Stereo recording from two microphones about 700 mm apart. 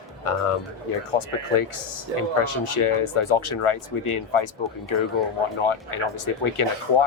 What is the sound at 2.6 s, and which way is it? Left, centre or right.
Speech, left.